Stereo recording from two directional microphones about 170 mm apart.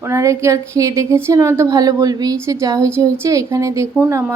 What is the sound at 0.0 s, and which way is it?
A woman's voice, 15° right (ahead or behind).